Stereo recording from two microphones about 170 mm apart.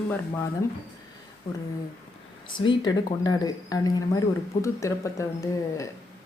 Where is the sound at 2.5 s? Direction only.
25° left (ahead or behind).